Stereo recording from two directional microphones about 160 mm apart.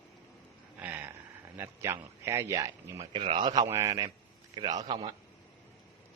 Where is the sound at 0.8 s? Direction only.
10° right (ahead or behind).